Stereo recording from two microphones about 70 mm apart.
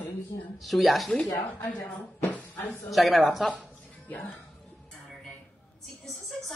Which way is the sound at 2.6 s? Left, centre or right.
Centre.